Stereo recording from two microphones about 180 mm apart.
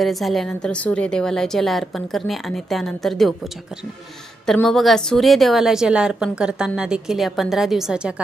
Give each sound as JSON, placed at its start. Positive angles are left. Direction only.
{"t": 0.0, "sound": "a woman's voice", "side_deg": 0}